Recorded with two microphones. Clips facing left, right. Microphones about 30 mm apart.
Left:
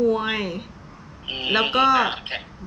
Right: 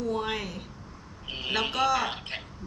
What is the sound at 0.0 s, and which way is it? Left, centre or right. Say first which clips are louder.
Speech: left 9 dB; left.